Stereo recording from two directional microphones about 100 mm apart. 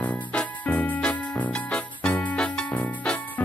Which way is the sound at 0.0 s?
15° left (ahead or behind).